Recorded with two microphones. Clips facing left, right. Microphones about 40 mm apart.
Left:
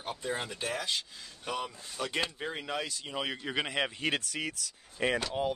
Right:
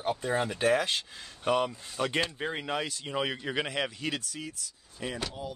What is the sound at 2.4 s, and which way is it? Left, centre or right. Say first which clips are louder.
Speech: right 3 dB; centre.